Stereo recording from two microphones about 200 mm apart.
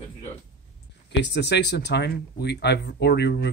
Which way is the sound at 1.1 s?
60° left (ahead or behind).